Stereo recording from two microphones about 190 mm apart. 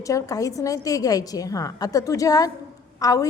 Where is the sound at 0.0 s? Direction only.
15° left (ahead or behind).